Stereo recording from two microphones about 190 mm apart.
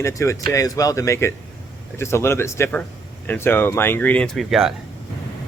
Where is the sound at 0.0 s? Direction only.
15° left (ahead or behind).